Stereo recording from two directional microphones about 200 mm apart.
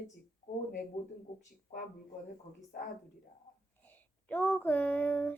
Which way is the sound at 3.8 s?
10° left (ahead or behind).